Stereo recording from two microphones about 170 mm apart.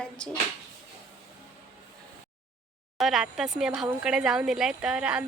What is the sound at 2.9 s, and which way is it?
A woman's voice, centre (ahead or behind).